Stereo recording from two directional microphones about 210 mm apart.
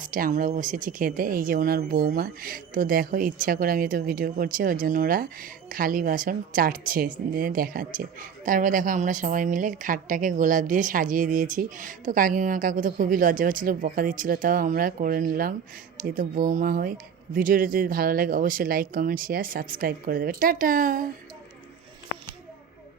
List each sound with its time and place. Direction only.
0.0 s speech: 40° right (ahead or behind)